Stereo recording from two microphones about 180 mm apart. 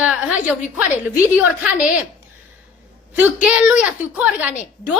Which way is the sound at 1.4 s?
5° right (ahead or behind).